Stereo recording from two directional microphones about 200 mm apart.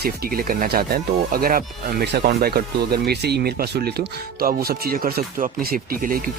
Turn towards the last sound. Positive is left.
turn(degrees=-45)  # may be behind; listen again after turning